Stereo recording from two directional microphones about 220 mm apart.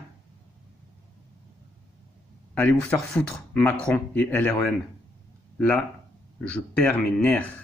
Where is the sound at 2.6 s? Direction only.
5° left (ahead or behind).